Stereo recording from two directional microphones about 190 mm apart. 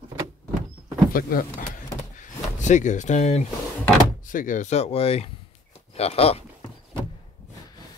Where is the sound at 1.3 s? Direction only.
50° left (ahead or behind).